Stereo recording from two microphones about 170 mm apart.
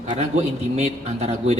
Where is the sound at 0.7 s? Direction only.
40° right (ahead or behind).